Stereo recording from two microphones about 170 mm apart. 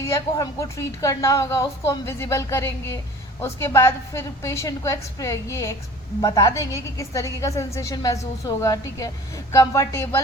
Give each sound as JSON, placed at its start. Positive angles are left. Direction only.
{"t": 0.0, "sound": "a woman's voice", "side_deg": 15}